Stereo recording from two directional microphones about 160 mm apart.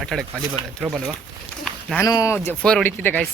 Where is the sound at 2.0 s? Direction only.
20° left (ahead or behind).